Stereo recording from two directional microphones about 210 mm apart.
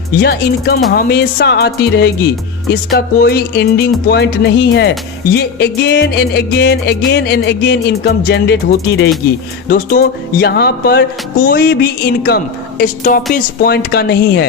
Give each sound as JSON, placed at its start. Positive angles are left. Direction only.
{"t": 0.2, "sound": "a woman's voice", "side_deg": 50}